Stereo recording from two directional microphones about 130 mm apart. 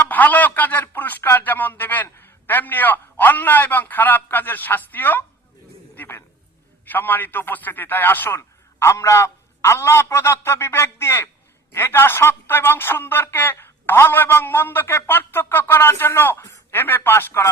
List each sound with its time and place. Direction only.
0.1 s a man's voice: 15° left (ahead or behind)